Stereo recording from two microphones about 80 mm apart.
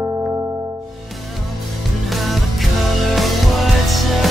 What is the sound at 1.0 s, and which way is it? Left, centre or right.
Music, centre.